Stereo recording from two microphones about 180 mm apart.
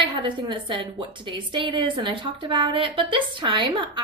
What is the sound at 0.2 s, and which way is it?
A woman's voice, 25° right (ahead or behind).